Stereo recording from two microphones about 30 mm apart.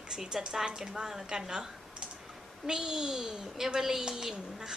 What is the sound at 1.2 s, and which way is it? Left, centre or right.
A woman's voice, right.